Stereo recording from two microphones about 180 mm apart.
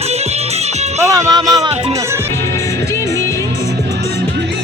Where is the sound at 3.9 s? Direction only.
65° right (ahead or behind).